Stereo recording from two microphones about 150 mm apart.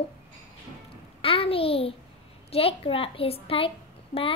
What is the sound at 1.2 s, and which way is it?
A child's voice, 40° left (ahead or behind).